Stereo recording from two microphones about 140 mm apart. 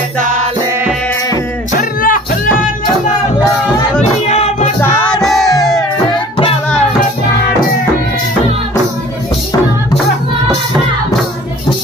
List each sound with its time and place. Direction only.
1.8 s music: 80° left
4.3 s music: 50° left (ahead or behind)
4.7 s music: 15° left (ahead or behind)
5.1 s music: centre (ahead or behind)